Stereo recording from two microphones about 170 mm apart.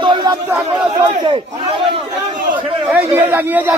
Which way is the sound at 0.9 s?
30° right (ahead or behind).